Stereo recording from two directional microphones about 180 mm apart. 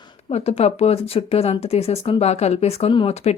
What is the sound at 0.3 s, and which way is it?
Speech, 35° left (ahead or behind).